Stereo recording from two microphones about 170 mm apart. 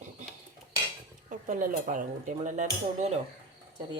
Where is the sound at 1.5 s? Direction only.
50° right (ahead or behind).